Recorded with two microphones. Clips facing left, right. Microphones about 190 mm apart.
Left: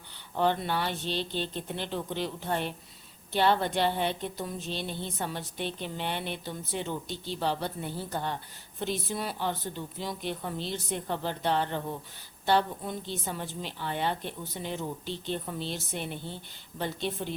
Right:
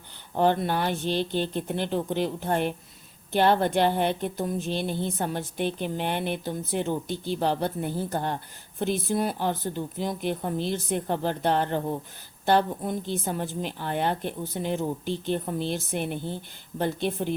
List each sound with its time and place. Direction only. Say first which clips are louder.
0.3 s a woman's voice: right 4 dB; 45° right (ahead or behind)